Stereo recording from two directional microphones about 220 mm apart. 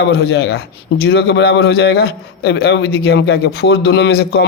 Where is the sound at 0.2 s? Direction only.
50° left (ahead or behind).